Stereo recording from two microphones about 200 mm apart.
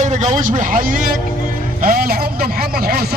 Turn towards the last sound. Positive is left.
turn(degrees=-50)  # may be behind; listen again after turning